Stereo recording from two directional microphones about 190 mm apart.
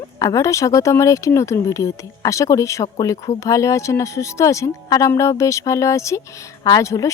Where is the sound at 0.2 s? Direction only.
20° left (ahead or behind).